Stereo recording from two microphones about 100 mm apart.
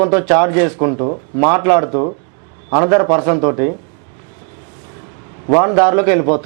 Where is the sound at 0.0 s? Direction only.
15° right (ahead or behind).